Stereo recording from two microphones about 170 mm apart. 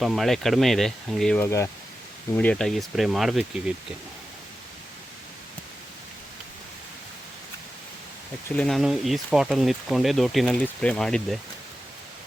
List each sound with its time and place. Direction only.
0.0 s speech: centre (ahead or behind)
1.5 s speech: 15° left (ahead or behind); by 3.4 s centre (ahead or behind)
8.4 s speech: 5° left (ahead or behind)